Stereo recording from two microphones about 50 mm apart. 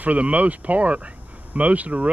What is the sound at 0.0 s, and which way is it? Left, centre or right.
Speech, right.